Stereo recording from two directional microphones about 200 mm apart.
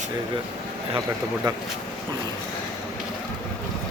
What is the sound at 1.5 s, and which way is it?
Speech, 20° right (ahead or behind).